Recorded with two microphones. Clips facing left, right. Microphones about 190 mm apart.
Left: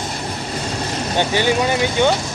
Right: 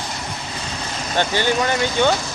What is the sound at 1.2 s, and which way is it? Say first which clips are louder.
Speech: left 2 dB; 15° left (ahead or behind).